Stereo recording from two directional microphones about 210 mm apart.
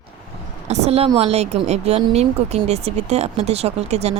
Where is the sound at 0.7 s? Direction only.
30° right (ahead or behind).